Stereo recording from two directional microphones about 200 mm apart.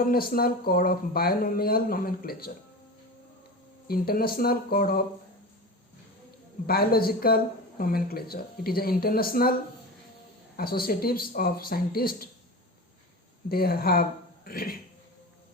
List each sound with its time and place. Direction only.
0.0 s speech: 50° left (ahead or behind)
3.8 s speech: 50° left (ahead or behind)
6.7 s speech: 50° left (ahead or behind)
10.6 s speech: 50° left (ahead or behind)
13.5 s speech: 50° left (ahead or behind)